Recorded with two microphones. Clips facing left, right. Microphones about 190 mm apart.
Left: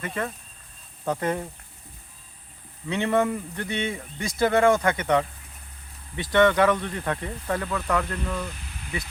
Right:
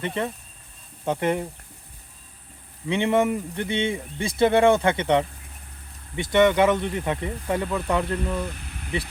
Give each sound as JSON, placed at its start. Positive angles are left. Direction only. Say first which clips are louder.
{"t": 0.0, "sound": "speech", "louder": "right 3 dB", "side_deg": -25}
{"t": 2.8, "sound": "speech", "louder": "right 2 dB", "side_deg": -20}
{"t": 6.3, "sound": "speech", "louder": "right 1 dB", "side_deg": -20}